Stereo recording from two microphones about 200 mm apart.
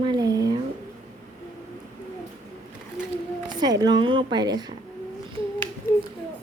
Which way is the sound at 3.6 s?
20° right (ahead or behind).